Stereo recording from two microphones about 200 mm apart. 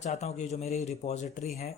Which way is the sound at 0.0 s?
35° left (ahead or behind).